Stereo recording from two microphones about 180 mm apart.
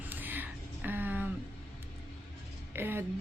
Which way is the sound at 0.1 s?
10° right (ahead or behind).